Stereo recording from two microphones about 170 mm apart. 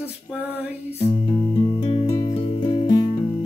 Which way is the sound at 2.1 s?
25° left (ahead or behind).